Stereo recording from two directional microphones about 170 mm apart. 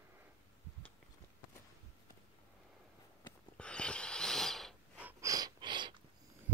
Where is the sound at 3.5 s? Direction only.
5° left (ahead or behind).